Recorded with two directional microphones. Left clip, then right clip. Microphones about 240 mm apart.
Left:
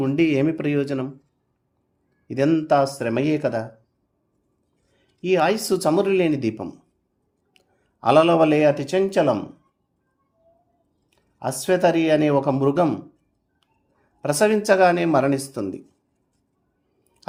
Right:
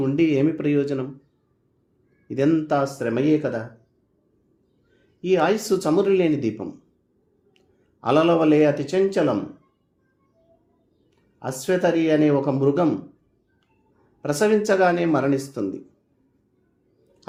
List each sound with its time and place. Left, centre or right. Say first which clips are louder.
0.0 s speech: even; left
2.2 s speech: left 1 dB; left
5.2 s speech: even; left
11.3 s speech: left 2 dB; left
14.2 s speech: left 1 dB; left